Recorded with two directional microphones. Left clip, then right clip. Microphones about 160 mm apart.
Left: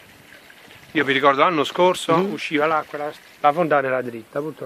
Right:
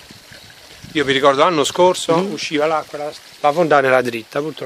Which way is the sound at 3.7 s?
65° right (ahead or behind).